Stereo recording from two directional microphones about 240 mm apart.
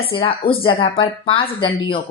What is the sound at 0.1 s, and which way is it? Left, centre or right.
A woman's voice, left.